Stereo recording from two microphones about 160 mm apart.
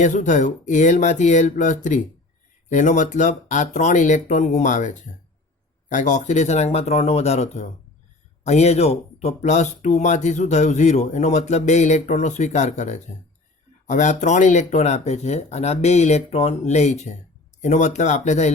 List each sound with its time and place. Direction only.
0.0 s speech: 50° left (ahead or behind)